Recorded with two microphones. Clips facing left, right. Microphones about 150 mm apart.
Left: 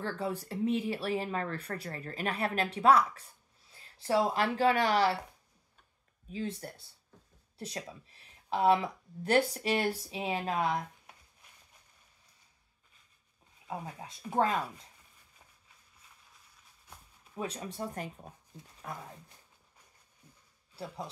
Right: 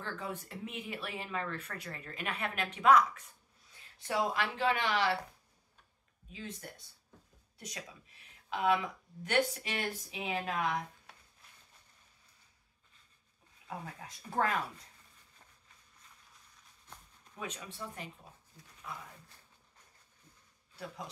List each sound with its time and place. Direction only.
0.0 s speech: 35° left (ahead or behind)
6.3 s speech: 35° left (ahead or behind)
13.7 s speech: 25° left (ahead or behind)
16.8 s a sound: 10° left (ahead or behind)
17.4 s speech: 35° left (ahead or behind)